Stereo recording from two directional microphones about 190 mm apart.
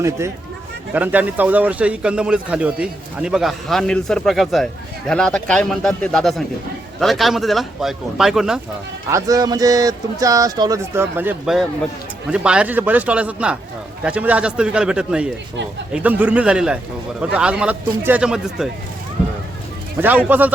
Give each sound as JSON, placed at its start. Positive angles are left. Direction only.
{"t": 0.9, "sound": "a man's voice", "side_deg": -10}
{"t": 9.0, "sound": "a man's voice", "side_deg": -15}
{"t": 20.0, "sound": "a man's voice", "side_deg": -10}